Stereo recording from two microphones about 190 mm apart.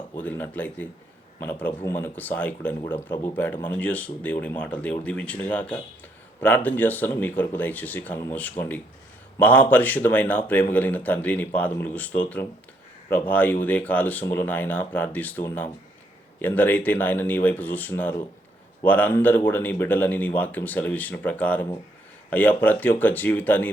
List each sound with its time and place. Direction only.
0.2 s a man's voice: 10° left (ahead or behind)